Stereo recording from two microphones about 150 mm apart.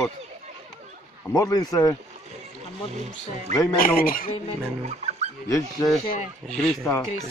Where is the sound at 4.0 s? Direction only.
75° left (ahead or behind).